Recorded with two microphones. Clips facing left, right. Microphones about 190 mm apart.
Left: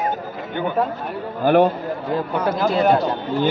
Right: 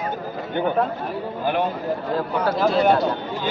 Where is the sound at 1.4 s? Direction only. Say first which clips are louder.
Left 8 dB; 45° left (ahead or behind).